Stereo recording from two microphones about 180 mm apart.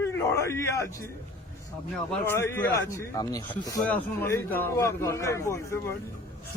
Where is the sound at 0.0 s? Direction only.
15° left (ahead or behind).